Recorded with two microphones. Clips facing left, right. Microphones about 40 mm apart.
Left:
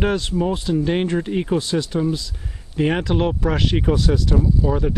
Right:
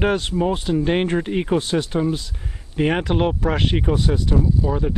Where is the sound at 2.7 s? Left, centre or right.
Centre.